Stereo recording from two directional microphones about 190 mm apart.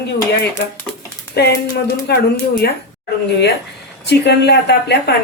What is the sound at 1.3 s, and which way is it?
Speech, 60° left (ahead or behind).